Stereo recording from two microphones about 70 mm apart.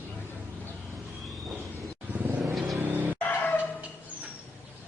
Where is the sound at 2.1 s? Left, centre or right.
Right.